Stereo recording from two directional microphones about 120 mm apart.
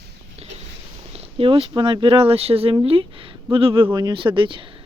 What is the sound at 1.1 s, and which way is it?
Speech, 55° right (ahead or behind).